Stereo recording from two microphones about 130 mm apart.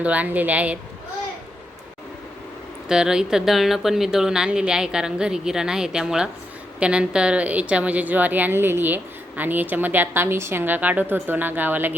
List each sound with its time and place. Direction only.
0.0 s a woman's voice: 10° right (ahead or behind)
2.9 s a woman's voice: 5° right (ahead or behind)